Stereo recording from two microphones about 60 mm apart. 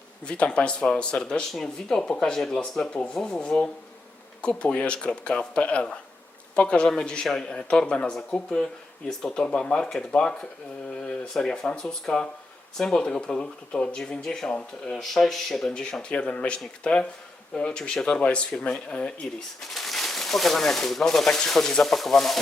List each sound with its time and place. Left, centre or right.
0.3 s speech: centre
19.6 s speech: centre